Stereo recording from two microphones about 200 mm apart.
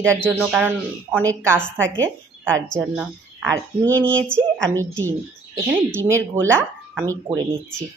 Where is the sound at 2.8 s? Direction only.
10° right (ahead or behind).